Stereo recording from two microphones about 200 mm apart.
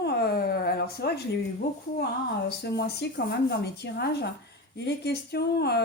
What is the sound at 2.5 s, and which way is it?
A woman's voice, 55° left (ahead or behind).